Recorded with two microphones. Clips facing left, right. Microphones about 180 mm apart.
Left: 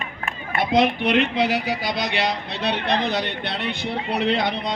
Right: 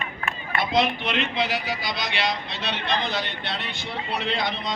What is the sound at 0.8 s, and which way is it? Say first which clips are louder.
A man's voice: left 6 dB; 60° left (ahead or behind).